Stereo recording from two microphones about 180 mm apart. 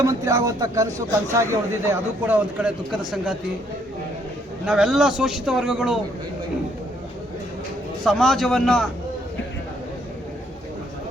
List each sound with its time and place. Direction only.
0.0 s a man's voice: 20° right (ahead or behind); by 3.3 s centre (ahead or behind)
4.6 s a man's voice: 5° right (ahead or behind)
8.0 s a man's voice: centre (ahead or behind)